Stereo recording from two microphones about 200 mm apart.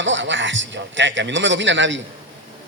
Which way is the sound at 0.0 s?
65° right (ahead or behind).